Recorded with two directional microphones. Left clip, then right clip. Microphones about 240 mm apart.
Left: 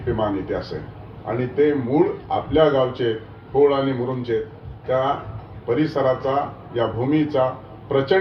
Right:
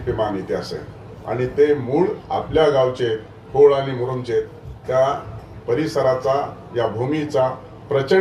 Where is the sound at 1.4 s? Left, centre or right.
Left.